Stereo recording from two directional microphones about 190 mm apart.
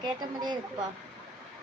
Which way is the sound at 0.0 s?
20° right (ahead or behind).